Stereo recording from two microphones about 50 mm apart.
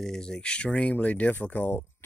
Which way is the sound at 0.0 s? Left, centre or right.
Centre.